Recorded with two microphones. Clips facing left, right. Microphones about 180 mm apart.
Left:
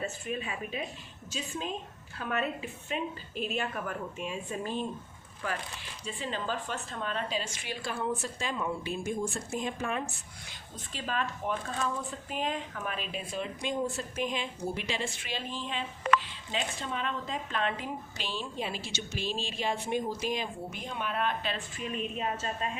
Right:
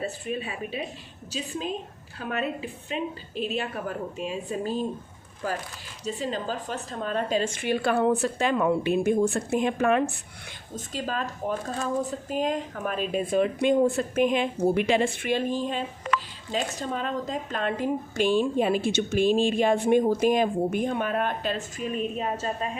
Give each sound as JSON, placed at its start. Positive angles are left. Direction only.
{"t": 0.0, "sound": "a woman's voice", "side_deg": -35}
{"t": 6.1, "sound": "a woman's voice", "side_deg": -40}
{"t": 10.8, "sound": "speech", "side_deg": -40}